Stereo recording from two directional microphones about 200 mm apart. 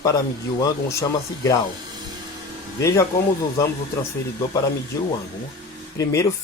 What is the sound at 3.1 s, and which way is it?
Speech, 15° left (ahead or behind).